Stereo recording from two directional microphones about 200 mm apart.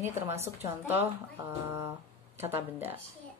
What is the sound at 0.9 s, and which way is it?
A woman's voice, 10° right (ahead or behind).